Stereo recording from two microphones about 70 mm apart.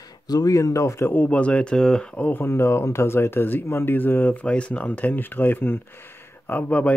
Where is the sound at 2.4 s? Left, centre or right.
Left.